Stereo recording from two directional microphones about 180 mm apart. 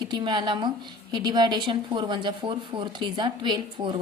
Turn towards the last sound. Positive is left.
turn(degrees=-25)  # may be behind; listen again after turning